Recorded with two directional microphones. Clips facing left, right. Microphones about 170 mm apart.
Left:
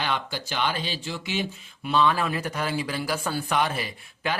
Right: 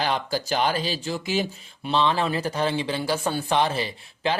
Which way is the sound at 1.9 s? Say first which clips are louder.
Right 1 dB; 25° right (ahead or behind).